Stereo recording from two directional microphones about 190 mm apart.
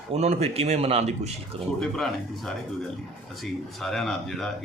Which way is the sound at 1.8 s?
Centre (ahead or behind).